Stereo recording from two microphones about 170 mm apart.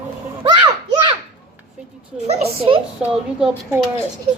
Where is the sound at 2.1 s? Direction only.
40° right (ahead or behind).